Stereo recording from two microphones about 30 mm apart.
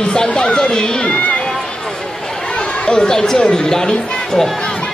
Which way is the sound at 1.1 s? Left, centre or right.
Left.